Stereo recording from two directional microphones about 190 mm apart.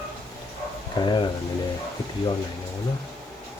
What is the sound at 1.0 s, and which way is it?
Speech, 25° left (ahead or behind).